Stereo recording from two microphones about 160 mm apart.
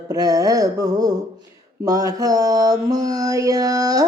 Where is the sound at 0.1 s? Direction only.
20° right (ahead or behind).